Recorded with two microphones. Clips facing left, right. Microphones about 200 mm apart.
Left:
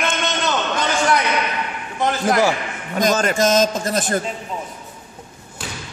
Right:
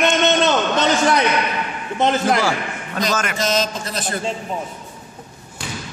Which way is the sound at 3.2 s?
40° left (ahead or behind).